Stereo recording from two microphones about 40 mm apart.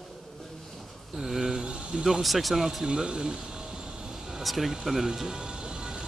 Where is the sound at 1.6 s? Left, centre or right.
Right.